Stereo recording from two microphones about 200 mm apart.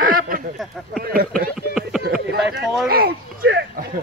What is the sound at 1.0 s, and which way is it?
Speech, 50° right (ahead or behind).